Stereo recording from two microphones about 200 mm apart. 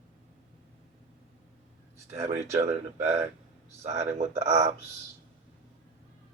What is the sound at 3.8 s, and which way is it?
Speech, 35° right (ahead or behind).